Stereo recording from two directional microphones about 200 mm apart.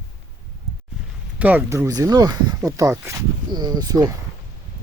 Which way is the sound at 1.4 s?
10° right (ahead or behind).